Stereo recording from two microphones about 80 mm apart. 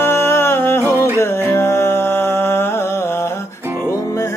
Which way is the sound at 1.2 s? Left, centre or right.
Left.